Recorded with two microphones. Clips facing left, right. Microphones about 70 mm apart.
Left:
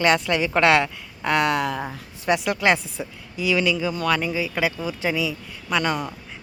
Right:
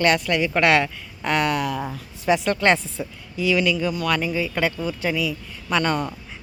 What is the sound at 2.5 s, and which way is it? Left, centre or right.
Speech, centre.